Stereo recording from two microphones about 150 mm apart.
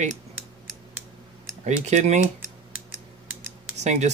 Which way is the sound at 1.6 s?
50° right (ahead or behind).